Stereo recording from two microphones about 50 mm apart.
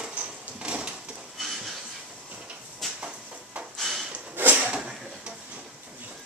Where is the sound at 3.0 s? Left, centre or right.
Right.